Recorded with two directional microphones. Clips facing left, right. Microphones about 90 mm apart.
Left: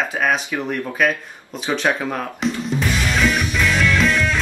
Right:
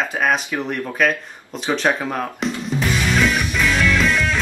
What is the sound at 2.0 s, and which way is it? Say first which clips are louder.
Music: even; 5° right (ahead or behind).